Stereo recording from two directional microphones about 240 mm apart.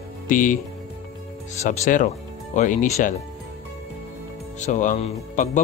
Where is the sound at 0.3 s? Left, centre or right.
Left.